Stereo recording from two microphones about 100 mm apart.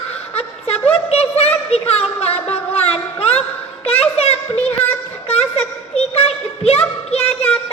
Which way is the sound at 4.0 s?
90° left.